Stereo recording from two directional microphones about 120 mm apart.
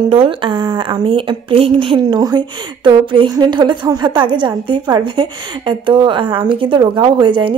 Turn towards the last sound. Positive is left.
turn(degrees=-40)  # may be behind; listen again after turning